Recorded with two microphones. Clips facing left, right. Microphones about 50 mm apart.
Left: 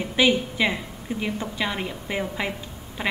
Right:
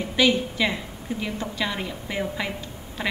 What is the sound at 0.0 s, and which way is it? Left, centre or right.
A woman's voice, centre.